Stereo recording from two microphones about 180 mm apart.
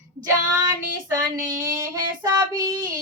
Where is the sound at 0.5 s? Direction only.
15° right (ahead or behind).